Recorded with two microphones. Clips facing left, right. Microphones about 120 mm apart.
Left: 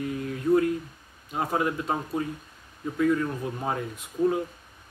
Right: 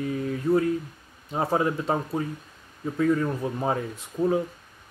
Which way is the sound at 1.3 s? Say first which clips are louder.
Right 2 dB; 30° right (ahead or behind).